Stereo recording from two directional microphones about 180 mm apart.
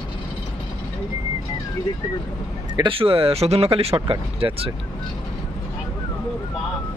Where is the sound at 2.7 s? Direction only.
30° right (ahead or behind).